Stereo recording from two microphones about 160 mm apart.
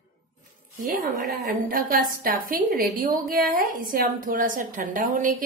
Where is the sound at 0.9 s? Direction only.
60° right (ahead or behind).